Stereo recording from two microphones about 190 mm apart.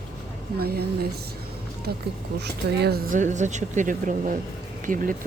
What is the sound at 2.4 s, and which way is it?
Speech, 60° right (ahead or behind).